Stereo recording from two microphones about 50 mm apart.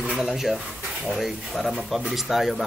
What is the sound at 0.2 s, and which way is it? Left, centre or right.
Speech, centre.